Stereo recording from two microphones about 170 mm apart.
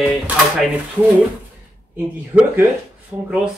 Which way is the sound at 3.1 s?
10° right (ahead or behind).